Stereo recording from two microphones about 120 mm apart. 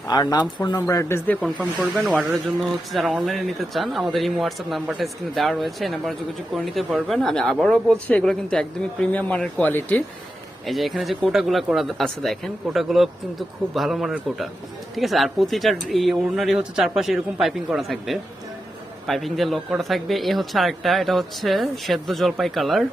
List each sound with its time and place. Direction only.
0.1 s speech: 35° left (ahead or behind)
0.8 s speech: 25° left (ahead or behind)
1.8 s speech: centre (ahead or behind); by 10.0 s 15° left (ahead or behind)
10.7 s speech: centre (ahead or behind)